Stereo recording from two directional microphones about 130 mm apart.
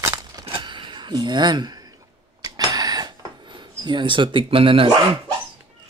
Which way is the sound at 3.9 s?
40° right (ahead or behind).